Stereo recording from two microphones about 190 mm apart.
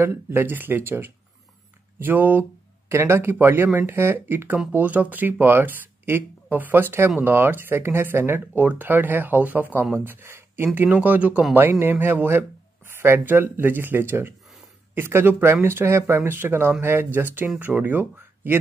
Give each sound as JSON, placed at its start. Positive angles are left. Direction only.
{"t": 0.0, "sound": "speech", "side_deg": -10}